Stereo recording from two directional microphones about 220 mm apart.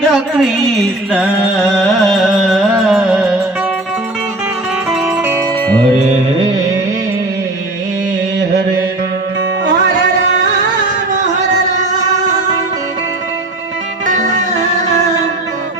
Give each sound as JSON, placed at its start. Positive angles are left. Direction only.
{"t": 0.1, "sound": "carnatic music", "side_deg": 0}
{"t": 4.9, "sound": "music", "side_deg": -5}
{"t": 14.1, "sound": "music", "side_deg": -35}